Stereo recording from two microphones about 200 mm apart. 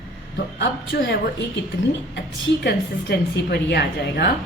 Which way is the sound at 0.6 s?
60° left (ahead or behind).